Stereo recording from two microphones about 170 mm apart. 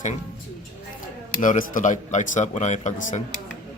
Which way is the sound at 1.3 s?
50° left (ahead or behind).